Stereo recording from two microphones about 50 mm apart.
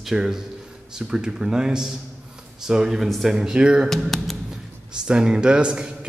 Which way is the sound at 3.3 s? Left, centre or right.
Centre.